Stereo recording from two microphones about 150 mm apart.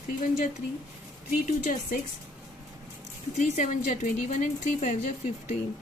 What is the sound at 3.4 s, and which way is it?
Speech, 55° left (ahead or behind).